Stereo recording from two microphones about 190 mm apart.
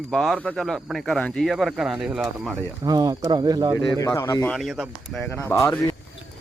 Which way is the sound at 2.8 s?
20° right (ahead or behind).